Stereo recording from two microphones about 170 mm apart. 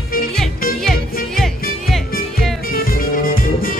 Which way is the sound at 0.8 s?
Centre (ahead or behind).